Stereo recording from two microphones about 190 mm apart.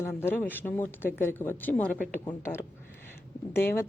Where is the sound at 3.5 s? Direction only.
10° left (ahead or behind).